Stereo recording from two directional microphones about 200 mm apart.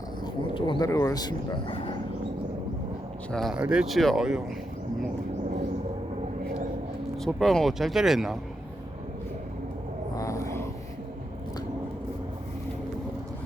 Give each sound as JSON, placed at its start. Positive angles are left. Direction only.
{"t": 0.5, "sound": "speech", "side_deg": 25}
{"t": 3.3, "sound": "speech", "side_deg": 0}
{"t": 7.2, "sound": "speech", "side_deg": 0}
{"t": 10.2, "sound": "a sound", "side_deg": 15}